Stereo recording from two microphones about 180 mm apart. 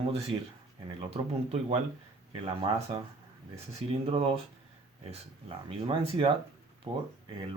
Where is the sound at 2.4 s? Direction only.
25° right (ahead or behind).